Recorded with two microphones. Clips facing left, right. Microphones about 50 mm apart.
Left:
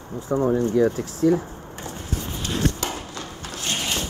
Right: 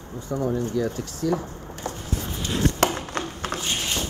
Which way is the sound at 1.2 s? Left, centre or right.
Left.